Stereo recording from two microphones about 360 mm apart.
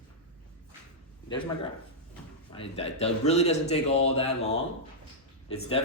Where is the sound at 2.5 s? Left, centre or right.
Centre.